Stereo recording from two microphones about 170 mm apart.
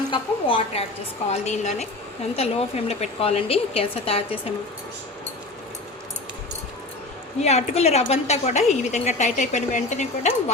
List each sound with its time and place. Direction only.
0.1 s a woman's voice: 30° left (ahead or behind)
1.3 s a woman's voice: 40° left (ahead or behind)
7.4 s a woman's voice: 40° left (ahead or behind)